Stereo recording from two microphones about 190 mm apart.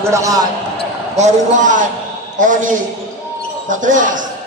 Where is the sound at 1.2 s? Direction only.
40° right (ahead or behind).